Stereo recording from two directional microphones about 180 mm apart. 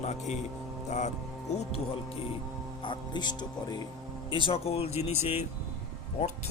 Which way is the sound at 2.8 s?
25° left (ahead or behind).